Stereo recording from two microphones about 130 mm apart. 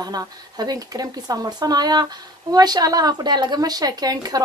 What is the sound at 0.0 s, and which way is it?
A woman's voice, 30° right (ahead or behind).